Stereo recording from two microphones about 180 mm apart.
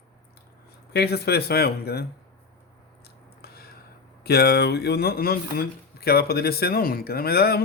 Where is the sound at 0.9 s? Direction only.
65° left (ahead or behind).